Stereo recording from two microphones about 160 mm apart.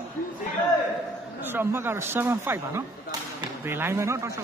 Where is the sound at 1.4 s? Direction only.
15° right (ahead or behind).